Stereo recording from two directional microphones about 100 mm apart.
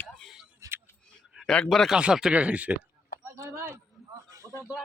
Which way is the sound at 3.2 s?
25° right (ahead or behind).